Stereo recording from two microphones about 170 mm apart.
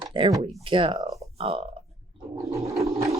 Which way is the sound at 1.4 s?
35° right (ahead or behind).